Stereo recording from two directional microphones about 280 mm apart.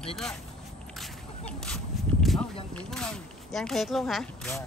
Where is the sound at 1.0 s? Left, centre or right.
Centre.